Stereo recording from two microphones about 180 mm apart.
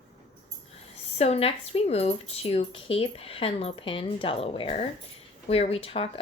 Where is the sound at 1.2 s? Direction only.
35° left (ahead or behind).